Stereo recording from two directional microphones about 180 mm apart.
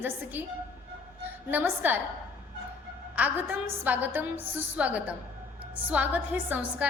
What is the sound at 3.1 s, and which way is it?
A woman's voice, 10° right (ahead or behind).